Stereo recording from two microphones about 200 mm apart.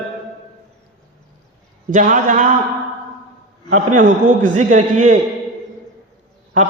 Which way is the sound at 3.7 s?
40° right (ahead or behind).